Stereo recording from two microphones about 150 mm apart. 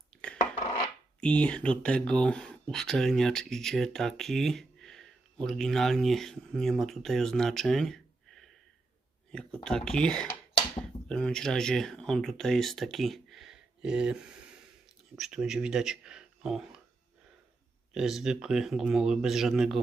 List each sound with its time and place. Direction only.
0.3 s a sound: 50° left (ahead or behind)
1.2 s speech: 5° left (ahead or behind)
17.9 s speech: 5° right (ahead or behind)